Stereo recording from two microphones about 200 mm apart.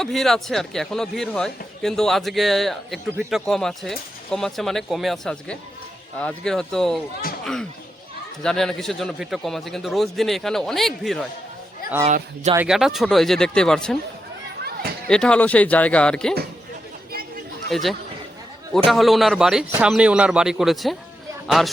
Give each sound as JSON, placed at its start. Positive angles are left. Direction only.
{"t": 0.0, "sound": "a man's voice", "side_deg": 0}
{"t": 12.0, "sound": "speech", "side_deg": -35}
{"t": 12.5, "sound": "a man's voice", "side_deg": -5}
{"t": 14.6, "sound": "a sound", "side_deg": -50}
{"t": 15.0, "sound": "a man's voice", "side_deg": 5}
{"t": 17.7, "sound": "a man's voice", "side_deg": 0}